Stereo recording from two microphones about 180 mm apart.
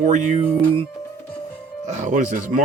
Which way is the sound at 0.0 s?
40° right (ahead or behind).